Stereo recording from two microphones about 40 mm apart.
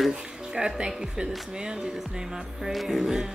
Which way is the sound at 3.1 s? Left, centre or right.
Centre.